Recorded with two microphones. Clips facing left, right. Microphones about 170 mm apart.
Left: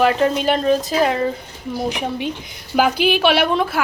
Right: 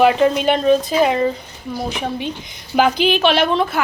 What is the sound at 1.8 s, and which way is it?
A woman's voice, 15° left (ahead or behind).